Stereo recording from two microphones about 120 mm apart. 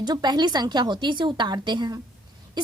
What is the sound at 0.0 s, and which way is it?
A woman's voice, 35° right (ahead or behind).